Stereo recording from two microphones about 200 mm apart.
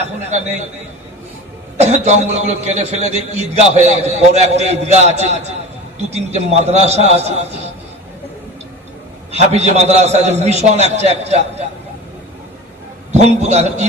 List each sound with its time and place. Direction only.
0.0 s a man's voice: 35° right (ahead or behind)
1.8 s a man's voice: 35° right (ahead or behind)
9.3 s a man's voice: 30° right (ahead or behind)
13.1 s a man's voice: 35° right (ahead or behind)